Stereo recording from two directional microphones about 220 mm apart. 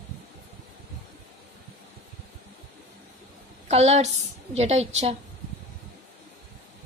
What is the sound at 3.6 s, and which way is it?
A woman's voice, 30° right (ahead or behind).